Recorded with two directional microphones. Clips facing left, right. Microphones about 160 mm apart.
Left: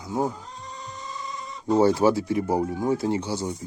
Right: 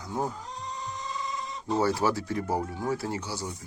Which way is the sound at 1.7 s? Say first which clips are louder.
Left 7 dB; 20° left (ahead or behind).